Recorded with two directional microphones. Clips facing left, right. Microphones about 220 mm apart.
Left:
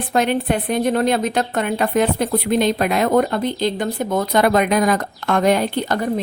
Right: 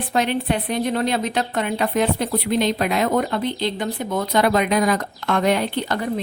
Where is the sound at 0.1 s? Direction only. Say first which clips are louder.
Left 3 dB; 50° left (ahead or behind).